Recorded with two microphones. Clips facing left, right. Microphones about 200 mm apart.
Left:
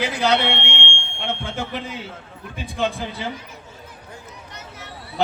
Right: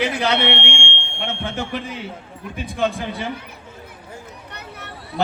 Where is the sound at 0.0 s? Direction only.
60° right (ahead or behind).